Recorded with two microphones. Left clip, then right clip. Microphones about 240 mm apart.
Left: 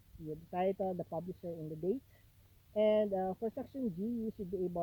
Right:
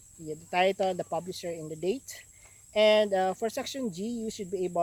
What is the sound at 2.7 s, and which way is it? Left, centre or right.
Speech, centre.